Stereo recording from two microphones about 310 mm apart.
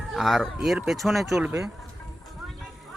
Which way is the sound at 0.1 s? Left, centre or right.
Centre.